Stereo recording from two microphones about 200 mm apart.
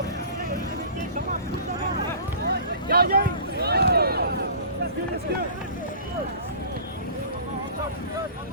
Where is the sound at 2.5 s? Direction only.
50° right (ahead or behind).